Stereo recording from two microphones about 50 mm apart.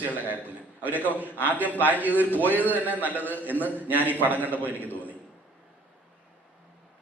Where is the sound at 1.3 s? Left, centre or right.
Left.